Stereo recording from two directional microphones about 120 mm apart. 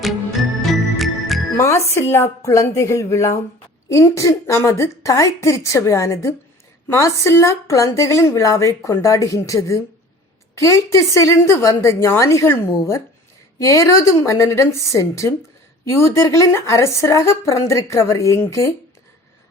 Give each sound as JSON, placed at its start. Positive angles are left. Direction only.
{"t": 0.7, "sound": "music", "side_deg": 0}
{"t": 1.5, "sound": "speech", "side_deg": 25}